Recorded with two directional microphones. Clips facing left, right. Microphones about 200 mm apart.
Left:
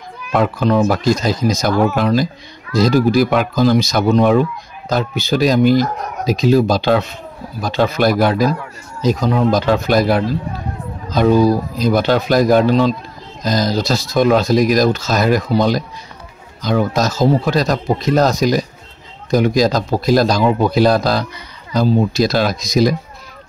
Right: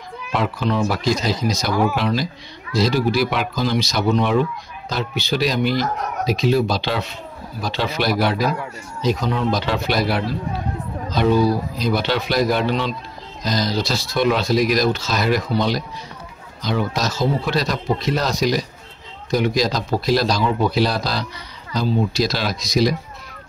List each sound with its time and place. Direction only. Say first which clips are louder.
0.3 s speech: left 6 dB; 45° left (ahead or behind)